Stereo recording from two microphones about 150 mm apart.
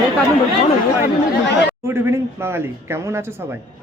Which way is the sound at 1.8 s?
15° right (ahead or behind).